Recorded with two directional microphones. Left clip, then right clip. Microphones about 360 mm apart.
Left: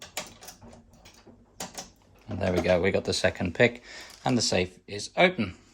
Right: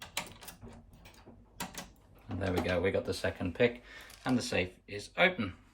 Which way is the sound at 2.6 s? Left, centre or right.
Centre.